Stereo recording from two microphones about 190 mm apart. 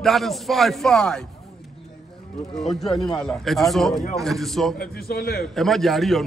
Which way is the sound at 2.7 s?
Centre (ahead or behind).